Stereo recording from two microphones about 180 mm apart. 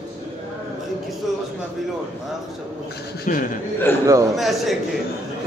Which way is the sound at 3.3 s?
45° left (ahead or behind).